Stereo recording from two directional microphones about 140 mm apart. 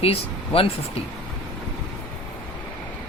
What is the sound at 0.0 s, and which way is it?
Speech, 45° left (ahead or behind).